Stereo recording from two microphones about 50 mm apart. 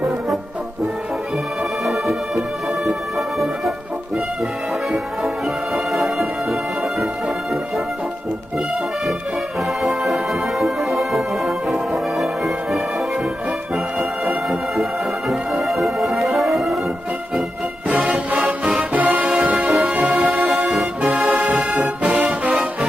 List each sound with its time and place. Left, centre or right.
1.9 s music: centre
9.8 s music: centre
14.5 s music: centre
17.8 s music: right
20.5 s music: centre
21.1 s music: right
22.0 s music: right